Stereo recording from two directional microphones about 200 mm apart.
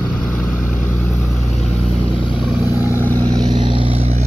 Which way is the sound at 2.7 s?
10° right (ahead or behind).